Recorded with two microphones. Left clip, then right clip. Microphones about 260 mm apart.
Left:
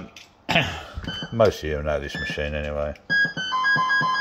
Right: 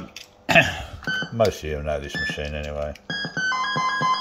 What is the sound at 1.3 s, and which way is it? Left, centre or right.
Speech, centre.